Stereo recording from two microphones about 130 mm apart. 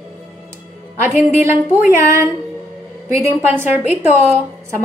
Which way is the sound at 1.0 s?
15° right (ahead or behind).